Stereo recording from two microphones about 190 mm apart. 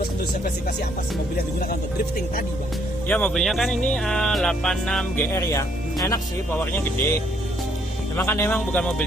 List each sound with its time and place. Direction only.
3.1 s speech: 10° left (ahead or behind)
5.3 s a man's voice: 15° left (ahead or behind)